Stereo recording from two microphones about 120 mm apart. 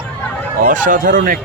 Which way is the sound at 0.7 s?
90° right.